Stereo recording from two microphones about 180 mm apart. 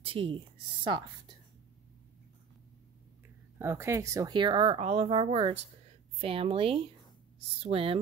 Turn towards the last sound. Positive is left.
turn(degrees=-30)  # may be behind; listen again after turning